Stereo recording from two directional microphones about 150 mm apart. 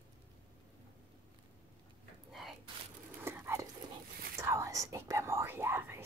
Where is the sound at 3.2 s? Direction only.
20° right (ahead or behind).